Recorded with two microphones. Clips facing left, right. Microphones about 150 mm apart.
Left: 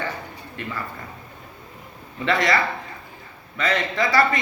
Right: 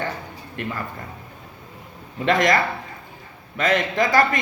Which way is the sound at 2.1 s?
45° right (ahead or behind).